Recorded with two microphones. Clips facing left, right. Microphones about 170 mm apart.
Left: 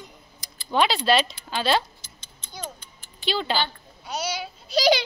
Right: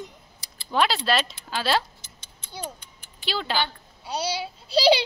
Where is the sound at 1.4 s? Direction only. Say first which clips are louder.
Left 1 dB; 5° right (ahead or behind).